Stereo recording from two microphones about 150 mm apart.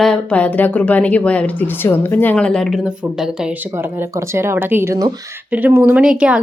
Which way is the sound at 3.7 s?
15° right (ahead or behind).